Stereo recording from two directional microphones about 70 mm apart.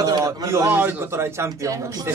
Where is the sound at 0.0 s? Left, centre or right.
Right.